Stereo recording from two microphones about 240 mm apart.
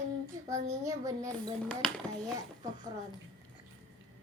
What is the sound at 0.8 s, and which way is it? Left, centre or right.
Speech, centre.